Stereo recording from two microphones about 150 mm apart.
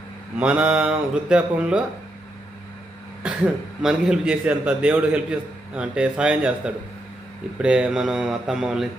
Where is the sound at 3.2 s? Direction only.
5° right (ahead or behind).